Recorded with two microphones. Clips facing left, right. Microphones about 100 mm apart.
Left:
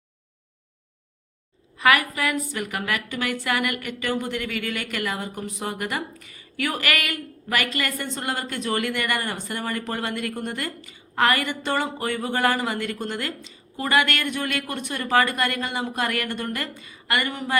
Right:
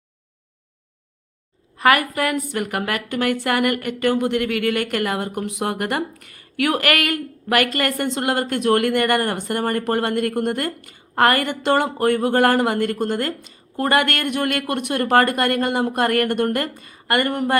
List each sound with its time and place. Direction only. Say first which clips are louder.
1.8 s a woman's voice: right 3 dB; 45° right (ahead or behind)